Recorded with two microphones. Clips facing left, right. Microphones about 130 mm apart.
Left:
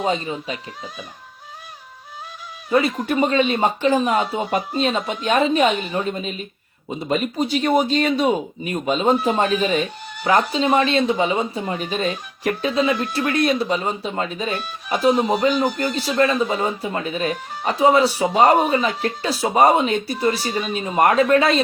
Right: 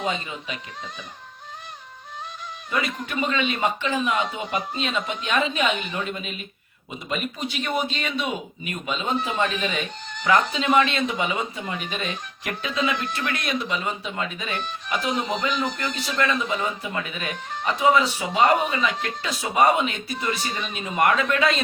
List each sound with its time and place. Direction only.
0.0 s speech: 35° left (ahead or behind)
2.6 s speech: 35° left (ahead or behind)